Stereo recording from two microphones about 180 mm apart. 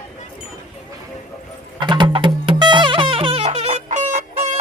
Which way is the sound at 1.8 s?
25° right (ahead or behind).